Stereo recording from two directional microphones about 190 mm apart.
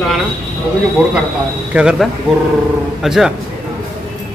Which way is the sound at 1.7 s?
5° right (ahead or behind).